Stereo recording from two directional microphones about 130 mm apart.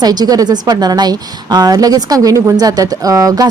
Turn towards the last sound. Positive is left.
turn(degrees=-25)  # may be behind; listen again after turning